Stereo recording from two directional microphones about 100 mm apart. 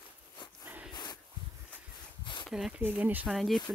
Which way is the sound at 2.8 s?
15° right (ahead or behind).